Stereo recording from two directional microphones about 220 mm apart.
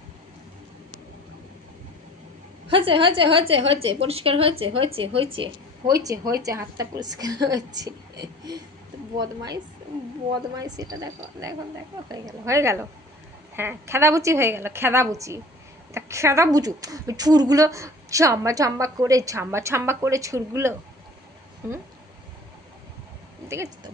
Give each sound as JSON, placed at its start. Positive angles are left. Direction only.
{"t": 2.7, "sound": "a woman's voice", "side_deg": -25}
{"t": 23.5, "sound": "a woman's voice", "side_deg": -15}